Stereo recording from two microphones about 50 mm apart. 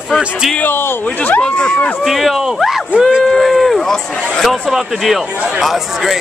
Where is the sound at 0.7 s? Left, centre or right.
Left.